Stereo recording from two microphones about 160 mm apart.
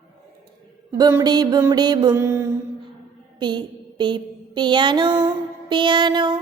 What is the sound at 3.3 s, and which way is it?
Mantra, 25° right (ahead or behind).